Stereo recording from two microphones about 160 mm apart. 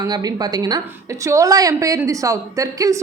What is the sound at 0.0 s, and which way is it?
A woman's voice, 25° right (ahead or behind).